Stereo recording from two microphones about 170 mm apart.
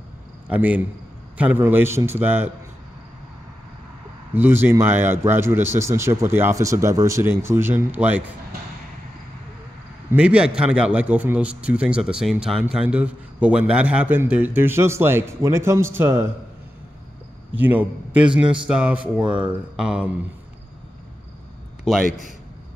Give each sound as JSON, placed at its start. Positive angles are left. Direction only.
{"t": 0.5, "sound": "a man's voice", "side_deg": -10}
{"t": 4.3, "sound": "a man's voice", "side_deg": -10}
{"t": 10.1, "sound": "a man's voice", "side_deg": -5}
{"t": 17.6, "sound": "a man's voice", "side_deg": -10}
{"t": 19.2, "sound": "speech", "side_deg": -30}
{"t": 19.8, "sound": "speech", "side_deg": -5}
{"t": 21.9, "sound": "speech", "side_deg": 0}